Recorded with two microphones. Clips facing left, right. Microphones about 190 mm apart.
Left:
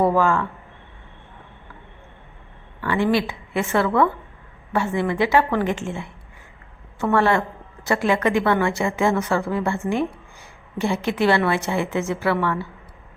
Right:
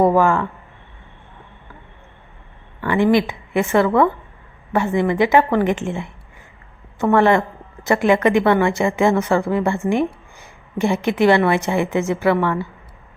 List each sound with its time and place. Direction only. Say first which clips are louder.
0.0 s a woman's voice: right 4 dB; 15° right (ahead or behind)
2.8 s a woman's voice: right 4 dB; 15° right (ahead or behind)
5.8 s a woman's voice: right 4 dB; 60° right (ahead or behind)
7.0 s a woman's voice: right 4 dB; 15° right (ahead or behind)